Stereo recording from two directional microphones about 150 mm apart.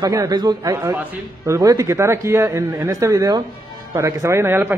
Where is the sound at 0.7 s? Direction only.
15° right (ahead or behind).